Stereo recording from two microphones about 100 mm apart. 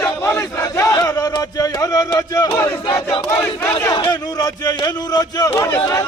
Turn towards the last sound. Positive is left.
turn(degrees=25)  # may be behind; listen again after turning